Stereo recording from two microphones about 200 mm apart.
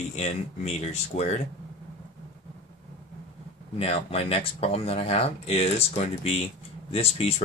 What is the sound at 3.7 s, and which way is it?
Speech, 30° left (ahead or behind).